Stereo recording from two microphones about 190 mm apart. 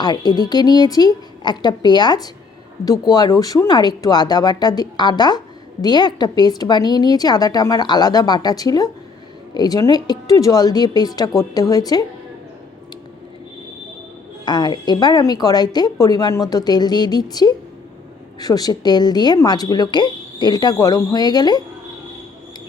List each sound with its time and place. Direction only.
0.0 s speech: 20° left (ahead or behind)
14.4 s speech: 20° left (ahead or behind)